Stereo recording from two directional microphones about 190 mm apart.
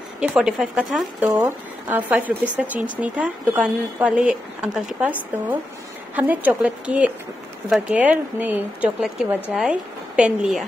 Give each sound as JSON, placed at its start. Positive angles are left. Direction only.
{"t": 0.2, "sound": "speech", "side_deg": -5}